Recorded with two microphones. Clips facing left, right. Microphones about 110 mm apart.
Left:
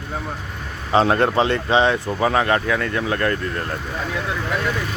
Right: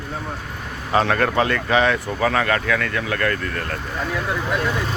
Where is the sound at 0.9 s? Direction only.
25° left (ahead or behind).